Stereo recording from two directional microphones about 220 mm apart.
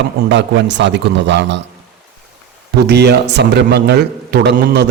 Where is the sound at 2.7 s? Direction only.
50° right (ahead or behind).